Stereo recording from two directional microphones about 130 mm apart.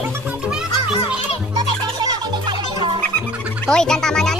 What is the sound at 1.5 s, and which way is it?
Music, 35° right (ahead or behind).